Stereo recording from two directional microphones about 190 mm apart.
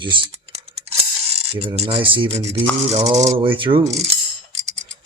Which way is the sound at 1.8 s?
30° right (ahead or behind).